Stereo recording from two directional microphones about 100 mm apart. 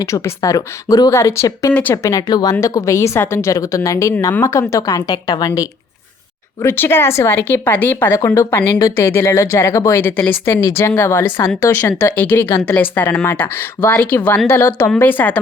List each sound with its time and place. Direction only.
0.0 s speech: 35° left (ahead or behind)
1.7 s a woman's voice: 15° left (ahead or behind)
2.0 s speech: 40° left (ahead or behind)
6.6 s a woman's voice: 25° left (ahead or behind)